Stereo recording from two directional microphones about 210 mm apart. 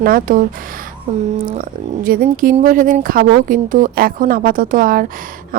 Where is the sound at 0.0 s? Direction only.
40° right (ahead or behind).